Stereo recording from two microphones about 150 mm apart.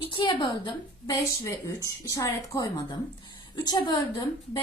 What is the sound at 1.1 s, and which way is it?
A woman's voice, 20° left (ahead or behind).